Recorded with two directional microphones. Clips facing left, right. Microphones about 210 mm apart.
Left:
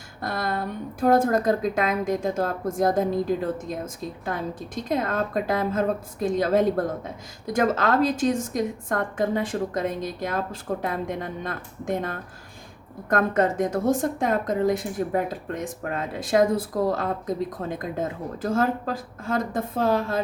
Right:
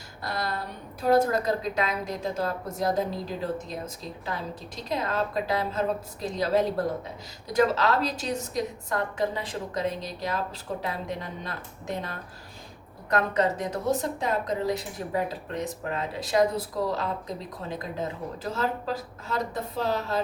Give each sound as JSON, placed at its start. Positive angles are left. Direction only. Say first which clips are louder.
{"t": 0.2, "sound": "speech", "louder": "left 4 dB", "side_deg": 50}